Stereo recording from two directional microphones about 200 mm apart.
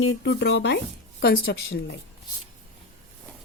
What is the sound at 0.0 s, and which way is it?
A woman's voice, 60° left (ahead or behind).